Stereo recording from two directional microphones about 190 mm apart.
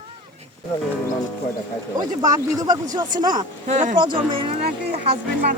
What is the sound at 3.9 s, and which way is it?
Speech, 25° right (ahead or behind).